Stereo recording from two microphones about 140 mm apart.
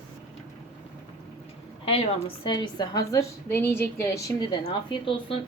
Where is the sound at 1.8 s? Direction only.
40° left (ahead or behind); by 4.4 s 20° left (ahead or behind).